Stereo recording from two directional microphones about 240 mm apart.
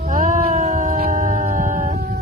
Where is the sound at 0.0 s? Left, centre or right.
Right.